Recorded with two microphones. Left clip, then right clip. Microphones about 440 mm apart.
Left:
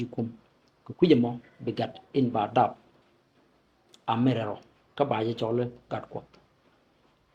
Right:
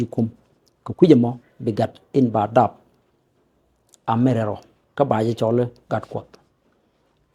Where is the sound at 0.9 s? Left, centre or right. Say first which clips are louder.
Right 8 dB; right.